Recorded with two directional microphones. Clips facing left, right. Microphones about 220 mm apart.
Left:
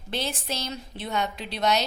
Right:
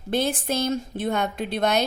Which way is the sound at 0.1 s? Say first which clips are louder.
Right 7 dB; 50° right (ahead or behind).